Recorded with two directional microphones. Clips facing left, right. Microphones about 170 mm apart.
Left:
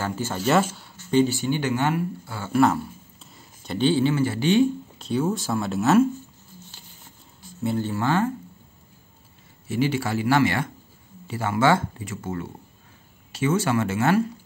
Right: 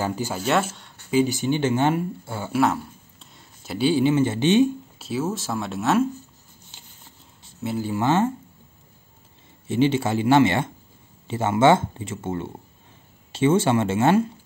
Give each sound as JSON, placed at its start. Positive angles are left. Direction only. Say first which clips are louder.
{"t": 0.0, "sound": "speech", "louder": "right 2 dB", "side_deg": -15}
{"t": 0.4, "sound": "speech", "louder": "left 3 dB", "side_deg": 0}
{"t": 1.1, "sound": "speech", "louder": "even", "side_deg": -15}
{"t": 2.5, "sound": "speech", "louder": "left 2 dB", "side_deg": 0}
{"t": 4.9, "sound": "speech", "louder": "left 2 dB", "side_deg": -5}
{"t": 7.6, "sound": "speech", "louder": "right 1 dB", "side_deg": -10}
{"t": 9.7, "sound": "speech", "louder": "right 4 dB", "side_deg": -25}